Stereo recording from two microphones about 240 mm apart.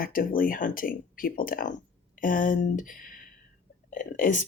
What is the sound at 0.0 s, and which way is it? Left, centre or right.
Speech, left.